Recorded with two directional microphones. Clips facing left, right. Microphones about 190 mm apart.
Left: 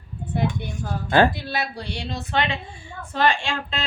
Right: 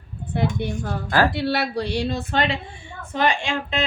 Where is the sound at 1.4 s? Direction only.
75° right (ahead or behind).